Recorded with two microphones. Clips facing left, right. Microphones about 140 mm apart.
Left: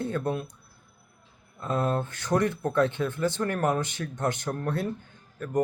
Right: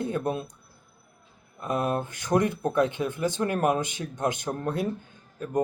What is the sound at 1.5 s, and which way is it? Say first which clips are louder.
Speech: even; 15° right (ahead or behind).